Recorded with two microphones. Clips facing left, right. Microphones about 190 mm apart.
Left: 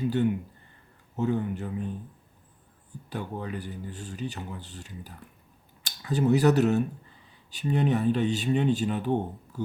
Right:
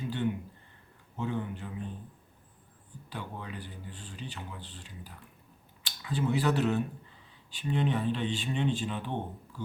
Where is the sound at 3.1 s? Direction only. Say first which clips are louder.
Left 7 dB; 45° left (ahead or behind).